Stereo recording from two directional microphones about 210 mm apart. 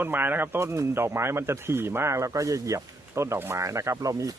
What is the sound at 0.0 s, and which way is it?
Speech, 10° right (ahead or behind).